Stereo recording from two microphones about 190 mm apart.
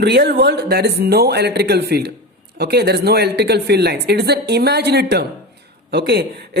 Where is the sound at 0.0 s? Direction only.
60° right (ahead or behind).